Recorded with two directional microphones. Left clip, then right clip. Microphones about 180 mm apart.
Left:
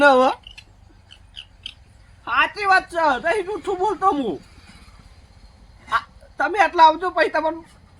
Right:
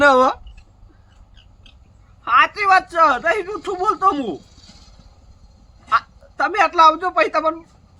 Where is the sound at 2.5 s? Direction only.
30° right (ahead or behind).